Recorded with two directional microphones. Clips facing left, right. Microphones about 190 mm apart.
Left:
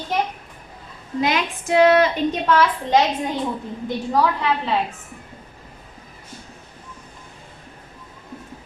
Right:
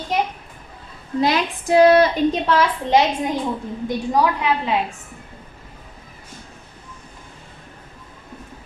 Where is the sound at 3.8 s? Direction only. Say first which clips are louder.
Right 1 dB; 15° right (ahead or behind).